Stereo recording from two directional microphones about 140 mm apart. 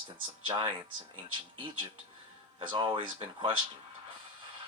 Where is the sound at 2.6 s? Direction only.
35° right (ahead or behind).